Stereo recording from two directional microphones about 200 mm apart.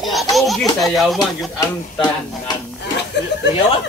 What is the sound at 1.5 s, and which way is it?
Speech, 20° left (ahead or behind).